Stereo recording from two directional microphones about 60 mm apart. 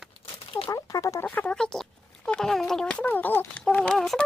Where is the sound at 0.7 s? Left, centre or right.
Left.